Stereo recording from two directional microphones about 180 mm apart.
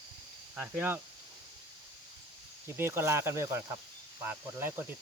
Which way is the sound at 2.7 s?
15° right (ahead or behind).